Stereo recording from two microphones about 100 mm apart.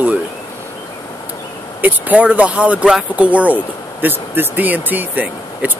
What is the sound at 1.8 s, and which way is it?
Speech, 15° right (ahead or behind).